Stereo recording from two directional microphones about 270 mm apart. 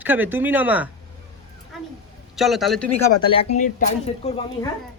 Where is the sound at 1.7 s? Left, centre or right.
Centre.